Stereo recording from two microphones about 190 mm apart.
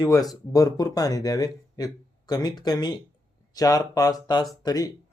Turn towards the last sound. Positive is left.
turn(degrees=20)  # may be behind; listen again after turning